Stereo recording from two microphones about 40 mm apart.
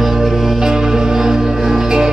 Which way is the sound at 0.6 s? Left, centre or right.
Centre.